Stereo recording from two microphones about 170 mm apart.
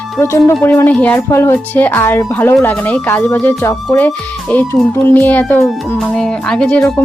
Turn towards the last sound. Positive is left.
turn(degrees=5)  # may be behind; listen again after turning